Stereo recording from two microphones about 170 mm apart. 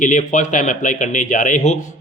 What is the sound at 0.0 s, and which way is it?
Speech, 45° left (ahead or behind).